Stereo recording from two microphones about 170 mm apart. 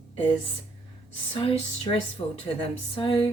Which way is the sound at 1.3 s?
35° left (ahead or behind).